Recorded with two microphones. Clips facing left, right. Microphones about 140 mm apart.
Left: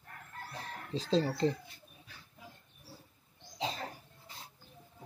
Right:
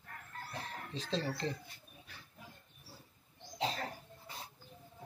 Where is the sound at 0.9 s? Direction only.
35° left (ahead or behind).